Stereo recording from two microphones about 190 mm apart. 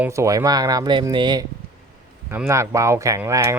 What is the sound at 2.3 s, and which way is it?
Speech, 15° right (ahead or behind).